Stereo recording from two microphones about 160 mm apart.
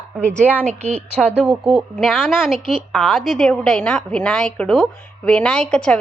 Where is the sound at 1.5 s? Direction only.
5° right (ahead or behind).